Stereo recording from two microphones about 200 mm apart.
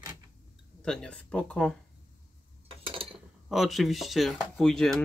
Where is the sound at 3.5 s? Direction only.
Centre (ahead or behind).